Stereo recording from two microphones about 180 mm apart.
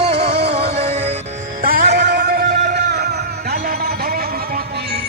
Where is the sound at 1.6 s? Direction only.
60° right (ahead or behind).